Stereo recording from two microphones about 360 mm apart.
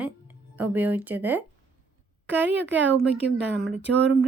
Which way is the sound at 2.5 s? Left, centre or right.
Right.